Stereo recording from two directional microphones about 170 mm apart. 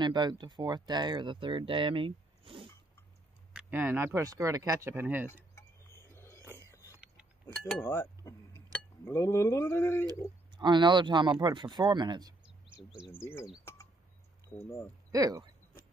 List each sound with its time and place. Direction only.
0.0 s speech: 25° right (ahead or behind)
3.5 s speech: 10° right (ahead or behind)
5.5 s a sound: 15° left (ahead or behind)
7.8 s speech: 15° left (ahead or behind)
10.0 s speech: 25° right (ahead or behind)
13.1 s speech: 15° left (ahead or behind)
15.0 s speech: 20° right (ahead or behind)